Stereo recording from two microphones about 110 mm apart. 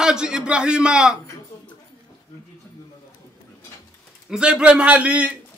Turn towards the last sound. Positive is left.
turn(degrees=-10)  # may be behind; listen again after turning